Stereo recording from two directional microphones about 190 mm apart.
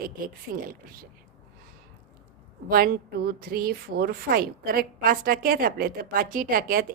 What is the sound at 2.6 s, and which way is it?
A woman's voice, 50° right (ahead or behind).